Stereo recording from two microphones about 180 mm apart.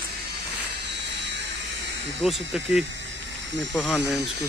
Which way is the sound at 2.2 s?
Centre (ahead or behind).